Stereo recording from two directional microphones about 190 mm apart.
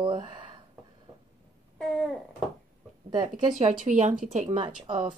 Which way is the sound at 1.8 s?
Centre (ahead or behind).